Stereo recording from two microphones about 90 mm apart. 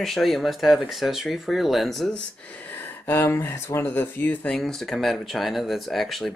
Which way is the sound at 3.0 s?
25° left (ahead or behind).